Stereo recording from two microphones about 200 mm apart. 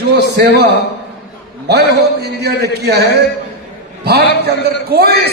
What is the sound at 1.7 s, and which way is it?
A man's voice, 55° right (ahead or behind).